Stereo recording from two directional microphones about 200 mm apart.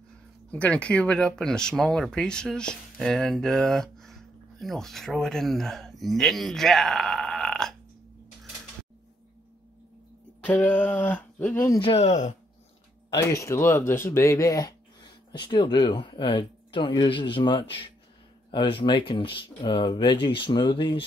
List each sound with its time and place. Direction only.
0.5 s speech: 5° left (ahead or behind)
10.4 s a sound: 10° left (ahead or behind)
11.8 s speech: 30° left (ahead or behind)
13.3 s speech: 15° left (ahead or behind)